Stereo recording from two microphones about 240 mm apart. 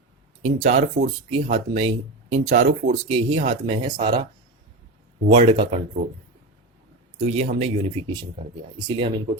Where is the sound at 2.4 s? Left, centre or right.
Right.